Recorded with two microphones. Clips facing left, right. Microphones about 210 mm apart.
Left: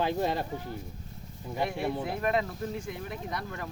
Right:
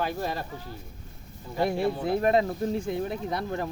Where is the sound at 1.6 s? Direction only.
35° right (ahead or behind).